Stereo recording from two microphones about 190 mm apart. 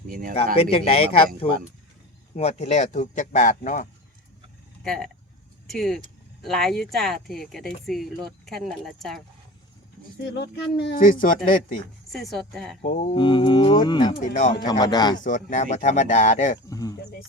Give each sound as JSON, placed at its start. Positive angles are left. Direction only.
{"t": 0.1, "sound": "speech", "side_deg": -45}
{"t": 0.3, "sound": "speech", "side_deg": 30}
{"t": 4.8, "sound": "speech", "side_deg": 0}
{"t": 10.2, "sound": "speech", "side_deg": 65}
{"t": 11.0, "sound": "speech", "side_deg": 45}
{"t": 12.1, "sound": "speech", "side_deg": 0}
{"t": 12.8, "sound": "speech", "side_deg": 40}
{"t": 13.1, "sound": "speech", "side_deg": 25}
{"t": 14.2, "sound": "speech", "side_deg": 45}
{"t": 14.7, "sound": "speech", "side_deg": 20}
{"t": 15.2, "sound": "speech", "side_deg": 40}
{"t": 16.6, "sound": "speech", "side_deg": 20}